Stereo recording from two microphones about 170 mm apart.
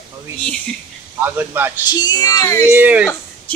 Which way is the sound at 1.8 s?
25° left (ahead or behind).